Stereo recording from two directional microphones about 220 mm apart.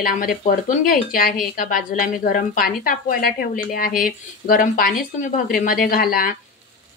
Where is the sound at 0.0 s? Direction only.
40° left (ahead or behind).